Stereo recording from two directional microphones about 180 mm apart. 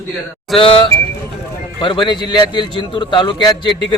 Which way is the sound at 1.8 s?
25° left (ahead or behind).